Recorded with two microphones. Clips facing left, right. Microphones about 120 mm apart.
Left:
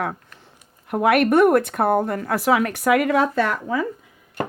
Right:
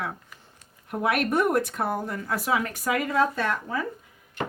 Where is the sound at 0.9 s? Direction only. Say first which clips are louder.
Left 8 dB; 70° left (ahead or behind); by 3.8 s 90° left.